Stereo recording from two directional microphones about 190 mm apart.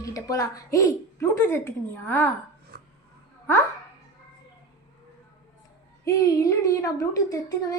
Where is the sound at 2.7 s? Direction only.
50° right (ahead or behind).